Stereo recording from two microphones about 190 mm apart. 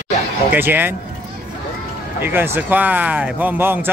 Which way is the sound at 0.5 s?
10° right (ahead or behind).